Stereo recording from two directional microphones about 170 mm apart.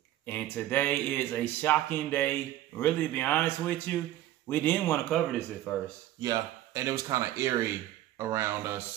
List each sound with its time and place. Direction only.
0.3 s speech: 10° left (ahead or behind)
6.2 s speech: 20° right (ahead or behind)